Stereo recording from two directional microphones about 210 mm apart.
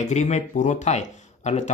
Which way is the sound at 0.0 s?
35° left (ahead or behind).